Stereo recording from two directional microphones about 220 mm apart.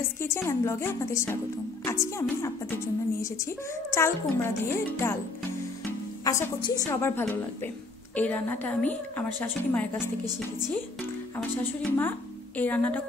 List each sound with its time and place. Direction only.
0.2 s a woman's voice: 10° left (ahead or behind)
3.9 s a woman's voice: 10° left (ahead or behind)
5.9 s music: 15° left (ahead or behind)
6.8 s a woman's voice: 10° left (ahead or behind)
11.3 s a woman's voice: 10° left (ahead or behind)